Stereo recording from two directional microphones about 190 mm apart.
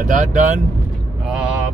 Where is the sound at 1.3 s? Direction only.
5° right (ahead or behind).